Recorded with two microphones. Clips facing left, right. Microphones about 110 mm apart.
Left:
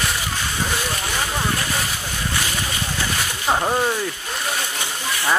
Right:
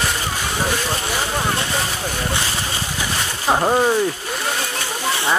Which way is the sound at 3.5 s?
15° right (ahead or behind).